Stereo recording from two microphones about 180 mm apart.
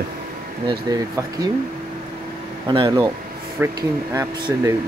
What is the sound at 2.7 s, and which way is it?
Speech, 30° right (ahead or behind).